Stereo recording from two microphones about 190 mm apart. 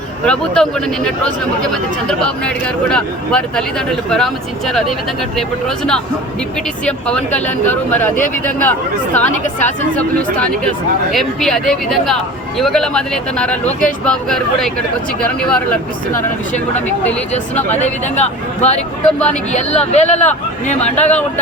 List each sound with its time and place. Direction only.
0.3 s speech: 5° left (ahead or behind)
17.5 s speech: 10° left (ahead or behind)
17.7 s speech: 35° left (ahead or behind)